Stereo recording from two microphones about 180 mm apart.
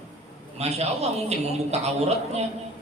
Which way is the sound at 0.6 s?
35° right (ahead or behind).